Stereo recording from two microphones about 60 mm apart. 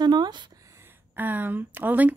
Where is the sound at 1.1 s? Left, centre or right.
Right.